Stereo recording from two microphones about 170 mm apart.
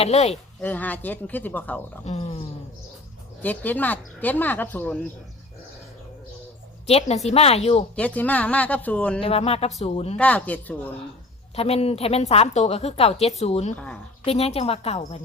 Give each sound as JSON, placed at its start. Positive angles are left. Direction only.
{"t": 0.0, "sound": "a woman's voice", "side_deg": 40}
{"t": 0.6, "sound": "speech", "side_deg": 10}
{"t": 2.0, "sound": "a woman's voice", "side_deg": 35}
{"t": 3.4, "sound": "speech", "side_deg": 10}
{"t": 6.8, "sound": "a woman's voice", "side_deg": 35}
{"t": 7.9, "sound": "speech", "side_deg": 10}
{"t": 9.2, "sound": "a woman's voice", "side_deg": 35}
{"t": 10.2, "sound": "speech", "side_deg": 10}
{"t": 11.5, "sound": "a woman's voice", "side_deg": 35}
{"t": 13.7, "sound": "speech", "side_deg": 5}
{"t": 14.3, "sound": "a woman's voice", "side_deg": 35}